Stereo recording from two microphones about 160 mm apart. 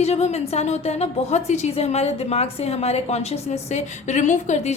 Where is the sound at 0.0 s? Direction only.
40° left (ahead or behind).